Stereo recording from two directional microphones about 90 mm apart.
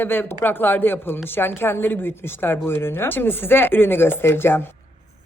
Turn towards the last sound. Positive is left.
turn(degrees=25)  # may be behind; listen again after turning